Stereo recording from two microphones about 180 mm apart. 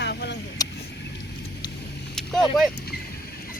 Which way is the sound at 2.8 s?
60° left (ahead or behind).